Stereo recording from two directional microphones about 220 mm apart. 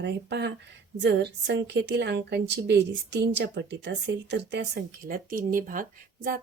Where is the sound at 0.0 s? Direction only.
50° right (ahead or behind).